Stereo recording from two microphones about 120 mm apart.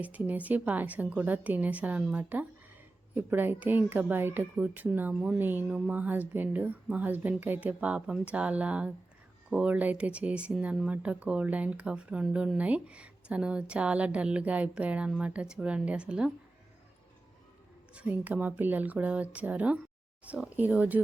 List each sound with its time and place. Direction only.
0.0 s speech: 10° right (ahead or behind)
17.9 s speech: 10° right (ahead or behind)